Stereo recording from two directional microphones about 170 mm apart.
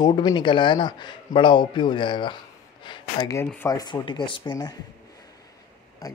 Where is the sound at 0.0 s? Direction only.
25° left (ahead or behind).